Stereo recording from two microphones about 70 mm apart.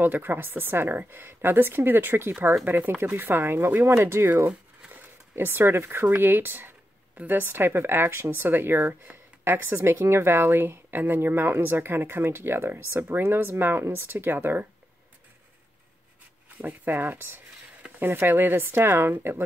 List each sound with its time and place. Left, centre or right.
0.0 s speech: right
4.5 s a sound: centre
5.3 s speech: right
16.6 s speech: right